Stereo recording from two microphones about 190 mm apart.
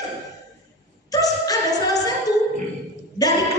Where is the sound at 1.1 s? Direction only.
20° left (ahead or behind).